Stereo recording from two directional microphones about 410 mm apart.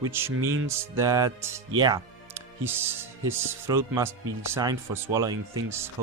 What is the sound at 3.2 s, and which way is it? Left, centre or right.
Speech, centre.